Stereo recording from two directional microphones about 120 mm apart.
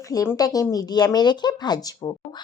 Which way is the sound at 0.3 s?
30° left (ahead or behind).